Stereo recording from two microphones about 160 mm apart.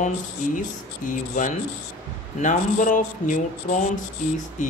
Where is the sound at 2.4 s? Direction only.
55° left (ahead or behind).